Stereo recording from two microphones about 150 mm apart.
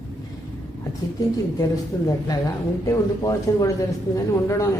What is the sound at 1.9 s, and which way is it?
A woman's voice, 20° left (ahead or behind).